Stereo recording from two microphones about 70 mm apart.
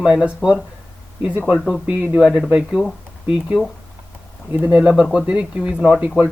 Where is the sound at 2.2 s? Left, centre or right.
Centre.